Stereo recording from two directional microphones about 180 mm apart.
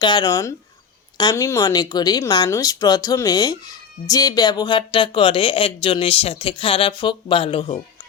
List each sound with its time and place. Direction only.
0.0 s speech: 25° left (ahead or behind)